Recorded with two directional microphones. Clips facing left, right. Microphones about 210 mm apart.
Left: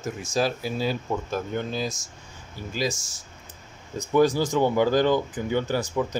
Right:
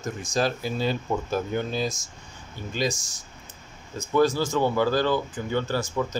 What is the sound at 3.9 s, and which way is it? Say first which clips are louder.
Speech: left 1 dB; 15° left (ahead or behind).